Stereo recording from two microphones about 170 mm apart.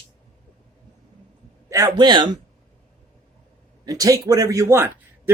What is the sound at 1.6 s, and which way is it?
Speech, 20° right (ahead or behind).